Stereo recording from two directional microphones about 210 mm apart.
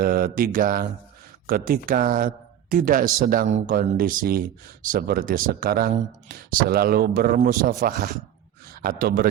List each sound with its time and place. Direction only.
0.0 s speech: 45° right (ahead or behind)